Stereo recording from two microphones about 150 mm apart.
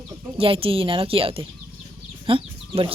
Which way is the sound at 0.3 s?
40° right (ahead or behind).